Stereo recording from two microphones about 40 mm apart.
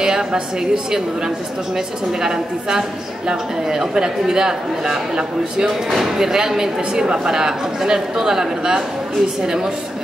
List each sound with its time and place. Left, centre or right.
0.0 s a sound: centre
2.2 s speech: centre
5.9 s speech: centre